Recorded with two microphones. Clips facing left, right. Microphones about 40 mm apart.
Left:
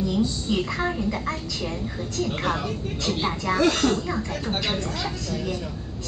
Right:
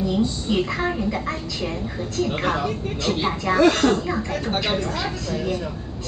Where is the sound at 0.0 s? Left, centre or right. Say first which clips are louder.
Right 2 dB; centre.